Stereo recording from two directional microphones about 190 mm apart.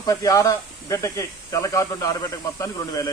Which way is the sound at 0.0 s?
20° left (ahead or behind).